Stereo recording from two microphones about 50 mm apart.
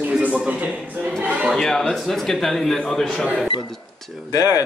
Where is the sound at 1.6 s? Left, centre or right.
Centre.